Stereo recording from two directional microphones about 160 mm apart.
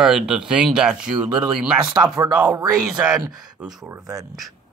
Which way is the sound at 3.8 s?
20° right (ahead or behind).